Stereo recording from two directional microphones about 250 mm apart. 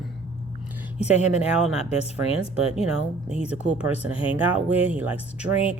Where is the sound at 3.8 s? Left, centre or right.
Centre.